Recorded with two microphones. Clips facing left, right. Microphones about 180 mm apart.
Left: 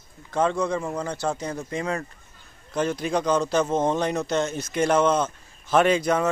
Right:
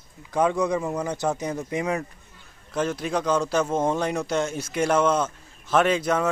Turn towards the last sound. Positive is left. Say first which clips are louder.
# left 1 dB
turn(degrees=0)  # may be behind; listen again after turning